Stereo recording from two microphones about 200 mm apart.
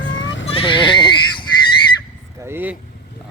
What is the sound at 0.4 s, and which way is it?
Goat, 30° left (ahead or behind).